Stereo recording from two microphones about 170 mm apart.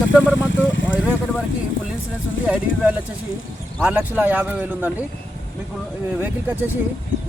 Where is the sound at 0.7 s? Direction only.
90° left.